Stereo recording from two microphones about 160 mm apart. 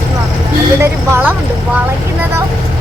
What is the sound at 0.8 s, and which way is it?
Speech, 15° right (ahead or behind).